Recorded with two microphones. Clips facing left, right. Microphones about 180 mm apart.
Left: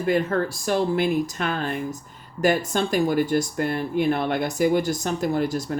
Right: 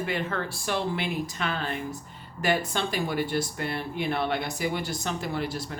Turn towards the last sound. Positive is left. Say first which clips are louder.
# left 8 dB
turn(degrees=45)  # may be behind; listen again after turning